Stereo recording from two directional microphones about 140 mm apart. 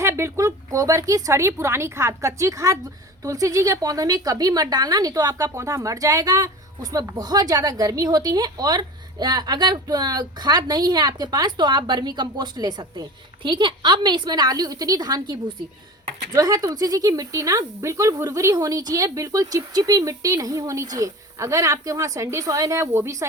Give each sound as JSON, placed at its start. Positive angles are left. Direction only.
{"t": 0.0, "sound": "a woman's voice", "side_deg": -20}